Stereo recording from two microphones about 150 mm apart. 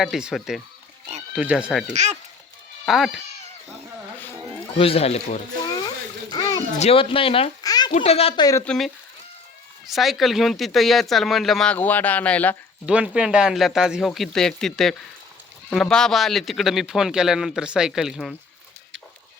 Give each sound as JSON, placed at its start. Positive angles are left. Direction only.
{"t": 0.0, "sound": "speech", "side_deg": -5}
{"t": 1.9, "sound": "speech", "side_deg": -50}
{"t": 2.8, "sound": "speech", "side_deg": 0}
{"t": 4.7, "sound": "speech", "side_deg": 40}
{"t": 6.3, "sound": "a sound", "side_deg": 25}
{"t": 6.7, "sound": "speech", "side_deg": 40}
{"t": 7.6, "sound": "a sound", "side_deg": 25}
{"t": 7.9, "sound": "speech", "side_deg": 40}
{"t": 8.4, "sound": "speech", "side_deg": 25}
{"t": 8.6, "sound": "speech", "side_deg": 5}
{"t": 12.8, "sound": "speech", "side_deg": -5}